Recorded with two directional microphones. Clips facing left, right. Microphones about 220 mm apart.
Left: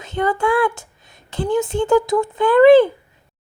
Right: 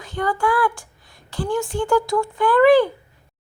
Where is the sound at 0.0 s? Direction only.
20° left (ahead or behind).